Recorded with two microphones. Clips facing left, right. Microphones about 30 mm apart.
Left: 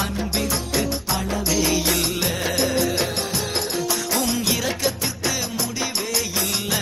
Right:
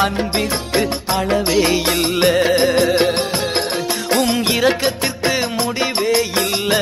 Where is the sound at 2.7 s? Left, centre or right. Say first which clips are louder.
Right 8 dB; right.